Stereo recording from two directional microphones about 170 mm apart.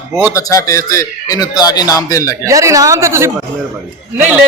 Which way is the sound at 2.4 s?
20° right (ahead or behind).